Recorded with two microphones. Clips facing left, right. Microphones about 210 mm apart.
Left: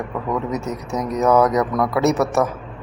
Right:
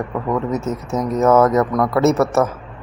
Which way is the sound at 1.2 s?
Centre (ahead or behind).